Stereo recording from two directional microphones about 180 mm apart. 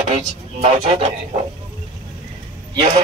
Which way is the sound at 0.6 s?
35° right (ahead or behind).